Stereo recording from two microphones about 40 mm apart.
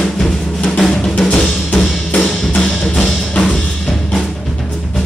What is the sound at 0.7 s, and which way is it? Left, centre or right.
Drum, centre.